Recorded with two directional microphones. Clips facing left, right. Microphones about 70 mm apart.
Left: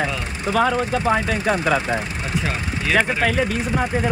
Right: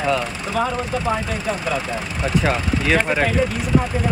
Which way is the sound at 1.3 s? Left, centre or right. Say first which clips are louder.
Left 4 dB; left.